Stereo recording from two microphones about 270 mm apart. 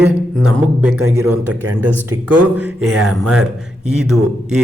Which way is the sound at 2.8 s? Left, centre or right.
Right.